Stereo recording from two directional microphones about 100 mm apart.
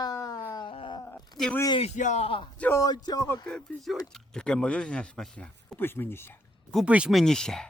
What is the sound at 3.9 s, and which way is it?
Speech, 5° left (ahead or behind).